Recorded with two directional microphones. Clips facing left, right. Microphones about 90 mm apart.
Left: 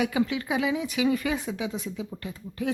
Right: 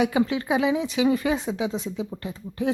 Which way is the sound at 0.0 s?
30° right (ahead or behind).